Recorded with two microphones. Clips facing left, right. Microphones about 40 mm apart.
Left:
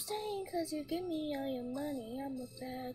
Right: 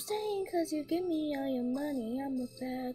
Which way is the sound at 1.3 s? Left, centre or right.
Right.